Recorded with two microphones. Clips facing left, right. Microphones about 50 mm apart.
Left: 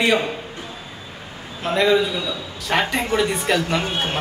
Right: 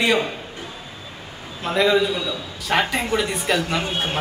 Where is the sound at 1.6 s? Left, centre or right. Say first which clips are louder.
Left 1 dB; centre.